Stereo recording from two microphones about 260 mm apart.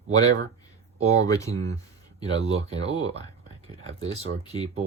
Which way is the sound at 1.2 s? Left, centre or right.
Centre.